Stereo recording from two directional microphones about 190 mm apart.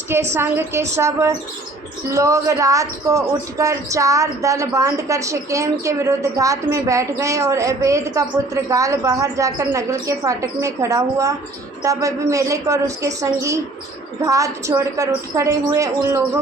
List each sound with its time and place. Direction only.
0.3 s speech: 10° right (ahead or behind)